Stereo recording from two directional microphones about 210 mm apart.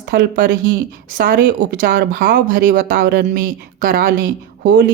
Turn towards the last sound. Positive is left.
turn(degrees=-40)  # may be behind; listen again after turning